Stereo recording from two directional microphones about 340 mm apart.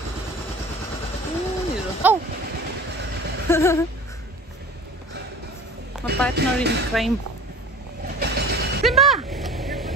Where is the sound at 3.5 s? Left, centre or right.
Centre.